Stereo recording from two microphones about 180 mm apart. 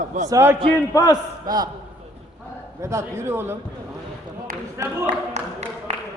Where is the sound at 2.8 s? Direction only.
15° right (ahead or behind).